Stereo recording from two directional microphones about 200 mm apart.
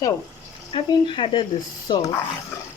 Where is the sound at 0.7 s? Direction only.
25° left (ahead or behind).